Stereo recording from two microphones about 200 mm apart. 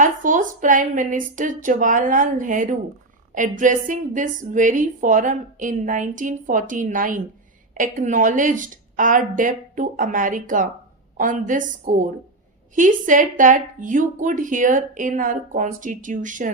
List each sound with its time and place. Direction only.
0.0 s a woman's voice: 40° right (ahead or behind)